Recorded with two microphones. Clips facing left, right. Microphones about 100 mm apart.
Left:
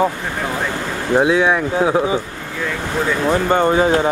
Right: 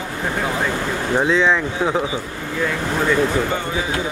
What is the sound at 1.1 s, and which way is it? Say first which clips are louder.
Speech: left 3 dB; 10° left (ahead or behind).